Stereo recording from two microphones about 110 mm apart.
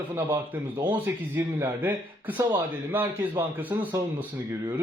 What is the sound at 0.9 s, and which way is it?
Speech, 15° right (ahead or behind).